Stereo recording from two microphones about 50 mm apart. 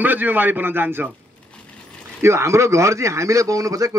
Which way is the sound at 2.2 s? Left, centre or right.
Right.